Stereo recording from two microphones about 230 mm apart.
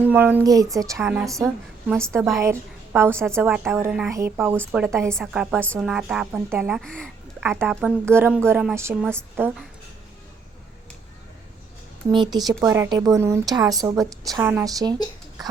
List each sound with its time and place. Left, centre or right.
0.0 s a woman's voice: centre
1.5 s a woman's voice: centre
12.1 s a woman's voice: centre